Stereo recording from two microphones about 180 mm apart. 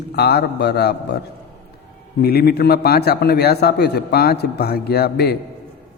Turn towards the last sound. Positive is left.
turn(degrees=60)  # may be behind; listen again after turning